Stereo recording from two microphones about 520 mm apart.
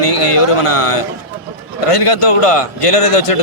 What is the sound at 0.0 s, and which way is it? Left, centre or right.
A man's voice, left.